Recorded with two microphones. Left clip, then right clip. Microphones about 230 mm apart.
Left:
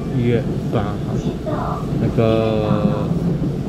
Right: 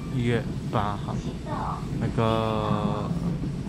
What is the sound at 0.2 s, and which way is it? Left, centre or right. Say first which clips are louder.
Speech: left 8 dB; centre.